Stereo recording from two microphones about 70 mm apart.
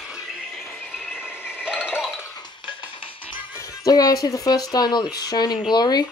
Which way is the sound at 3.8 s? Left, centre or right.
Left.